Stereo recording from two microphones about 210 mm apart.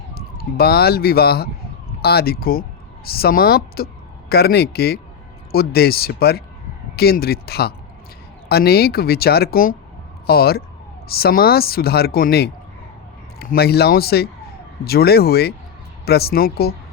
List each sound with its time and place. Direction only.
0.1 s speech: 50° left (ahead or behind)